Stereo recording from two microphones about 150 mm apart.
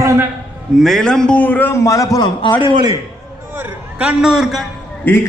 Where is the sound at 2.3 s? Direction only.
35° left (ahead or behind).